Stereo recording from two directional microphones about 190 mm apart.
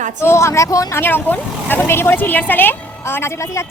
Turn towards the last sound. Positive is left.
turn(degrees=15)  # may be behind; listen again after turning